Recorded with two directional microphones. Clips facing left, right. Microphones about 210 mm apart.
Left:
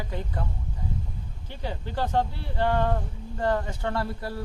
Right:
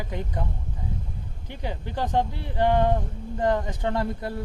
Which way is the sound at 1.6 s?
15° right (ahead or behind).